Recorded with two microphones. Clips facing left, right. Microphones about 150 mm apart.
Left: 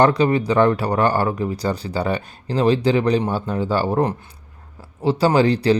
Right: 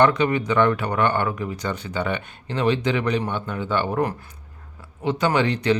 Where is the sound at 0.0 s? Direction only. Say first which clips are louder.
Left 3 dB; 35° left (ahead or behind).